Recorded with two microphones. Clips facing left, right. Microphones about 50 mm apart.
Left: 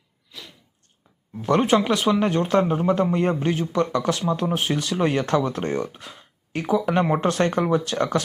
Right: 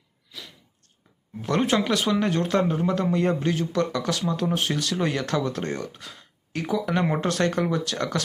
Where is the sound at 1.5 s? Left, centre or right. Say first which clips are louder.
Left 4 dB; centre.